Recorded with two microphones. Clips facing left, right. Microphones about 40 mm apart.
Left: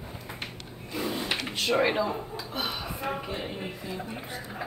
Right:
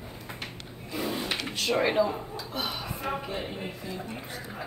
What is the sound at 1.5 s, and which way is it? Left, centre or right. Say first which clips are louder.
Speech: left 1 dB; centre.